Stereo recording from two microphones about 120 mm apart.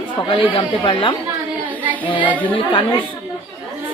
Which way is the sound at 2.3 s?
15° left (ahead or behind).